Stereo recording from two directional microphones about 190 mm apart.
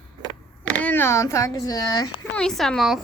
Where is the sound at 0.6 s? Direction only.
10° left (ahead or behind).